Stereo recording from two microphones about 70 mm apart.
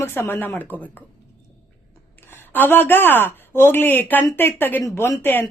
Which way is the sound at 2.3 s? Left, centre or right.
Left.